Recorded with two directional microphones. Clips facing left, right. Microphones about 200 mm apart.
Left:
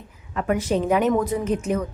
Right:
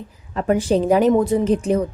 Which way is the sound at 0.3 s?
30° right (ahead or behind).